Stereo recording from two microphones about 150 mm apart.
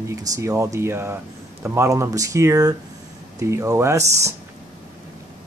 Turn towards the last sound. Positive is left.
turn(degrees=-20)  # may be behind; listen again after turning